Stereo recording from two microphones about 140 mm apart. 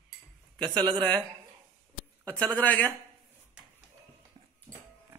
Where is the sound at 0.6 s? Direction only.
35° right (ahead or behind).